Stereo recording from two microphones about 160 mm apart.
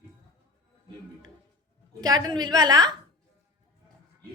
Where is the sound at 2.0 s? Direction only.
25° right (ahead or behind).